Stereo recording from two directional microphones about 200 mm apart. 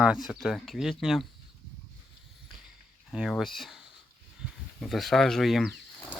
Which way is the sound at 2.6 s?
Centre (ahead or behind).